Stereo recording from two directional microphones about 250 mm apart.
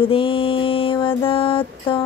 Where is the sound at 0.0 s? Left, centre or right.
Left.